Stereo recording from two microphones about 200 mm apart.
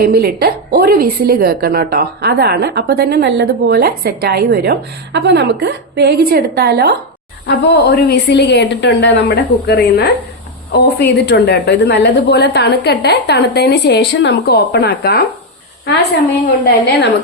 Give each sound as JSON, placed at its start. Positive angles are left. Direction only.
{"t": 0.0, "sound": "a woman's voice", "side_deg": -50}
{"t": 7.4, "sound": "a woman's voice", "side_deg": 60}